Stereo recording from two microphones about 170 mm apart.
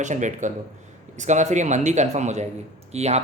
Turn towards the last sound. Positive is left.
turn(degrees=-40)  # may be behind; listen again after turning